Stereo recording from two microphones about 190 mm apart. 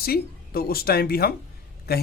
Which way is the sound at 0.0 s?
55° left (ahead or behind).